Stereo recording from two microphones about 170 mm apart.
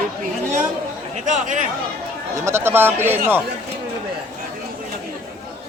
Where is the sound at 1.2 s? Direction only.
50° right (ahead or behind).